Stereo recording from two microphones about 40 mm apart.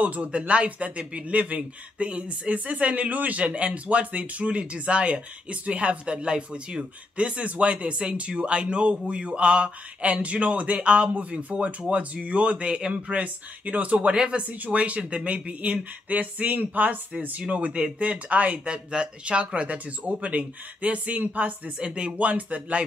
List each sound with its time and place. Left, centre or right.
0.0 s speech: right
12.9 s speech: right
14.5 s speech: right
18.7 s speech: right
21.7 s speech: right